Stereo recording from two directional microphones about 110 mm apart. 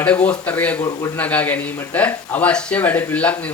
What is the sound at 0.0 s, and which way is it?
Speech, 10° left (ahead or behind).